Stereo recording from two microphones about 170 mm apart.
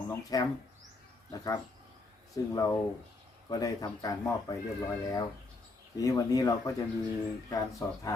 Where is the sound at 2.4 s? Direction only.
20° left (ahead or behind).